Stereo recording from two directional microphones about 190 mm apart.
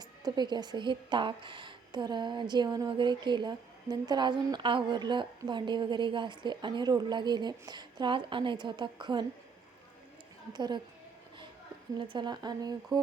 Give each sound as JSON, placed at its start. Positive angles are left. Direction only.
{"t": 0.0, "sound": "a woman's voice", "side_deg": -20}
{"t": 10.5, "sound": "a woman's voice", "side_deg": -25}
{"t": 12.1, "sound": "a woman's voice", "side_deg": -20}